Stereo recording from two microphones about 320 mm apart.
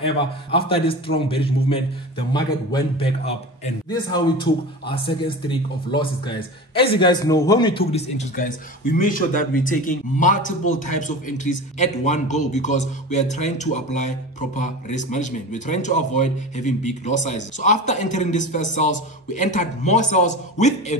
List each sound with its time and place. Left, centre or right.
0.5 s a man's voice: centre